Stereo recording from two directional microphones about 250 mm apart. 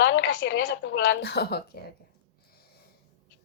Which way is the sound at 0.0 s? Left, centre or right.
Left.